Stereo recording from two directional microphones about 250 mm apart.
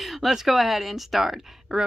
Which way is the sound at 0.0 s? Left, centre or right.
Centre.